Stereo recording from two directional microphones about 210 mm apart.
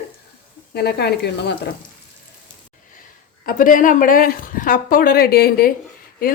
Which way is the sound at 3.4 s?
40° left (ahead or behind).